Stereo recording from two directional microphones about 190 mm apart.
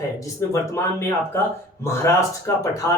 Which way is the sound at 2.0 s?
15° left (ahead or behind).